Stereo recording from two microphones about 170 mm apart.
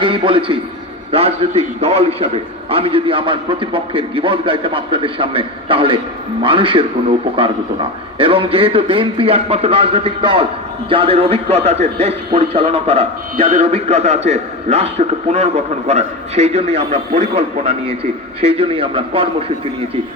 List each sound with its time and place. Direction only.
0.0 s a man's voice: 30° right (ahead or behind)